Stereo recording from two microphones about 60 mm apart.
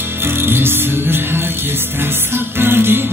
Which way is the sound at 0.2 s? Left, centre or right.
Right.